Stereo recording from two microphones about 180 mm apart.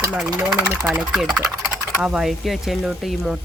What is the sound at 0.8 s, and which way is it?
Speech, centre (ahead or behind).